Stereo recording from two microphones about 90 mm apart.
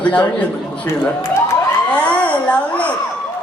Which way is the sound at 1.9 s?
15° left (ahead or behind).